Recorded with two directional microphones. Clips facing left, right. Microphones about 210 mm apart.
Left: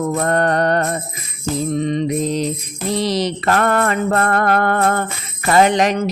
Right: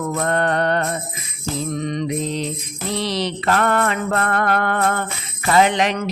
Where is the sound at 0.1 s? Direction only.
40° left (ahead or behind).